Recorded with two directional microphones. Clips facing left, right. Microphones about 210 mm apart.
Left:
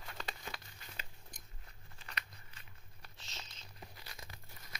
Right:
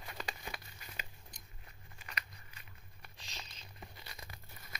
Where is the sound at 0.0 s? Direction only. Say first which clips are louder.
Right 1 dB; 15° right (ahead or behind).